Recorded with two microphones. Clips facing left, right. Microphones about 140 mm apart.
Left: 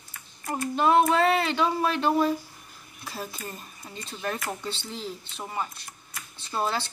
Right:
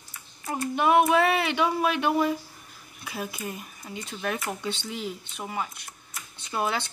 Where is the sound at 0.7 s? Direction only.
15° right (ahead or behind).